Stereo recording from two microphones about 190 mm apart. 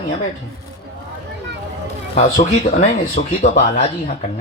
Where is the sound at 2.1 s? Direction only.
40° left (ahead or behind).